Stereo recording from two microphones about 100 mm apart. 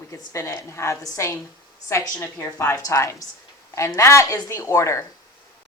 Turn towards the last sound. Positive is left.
turn(degrees=30)  # may be behind; listen again after turning